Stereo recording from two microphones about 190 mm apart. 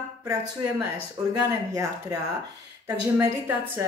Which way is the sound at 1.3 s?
20° right (ahead or behind).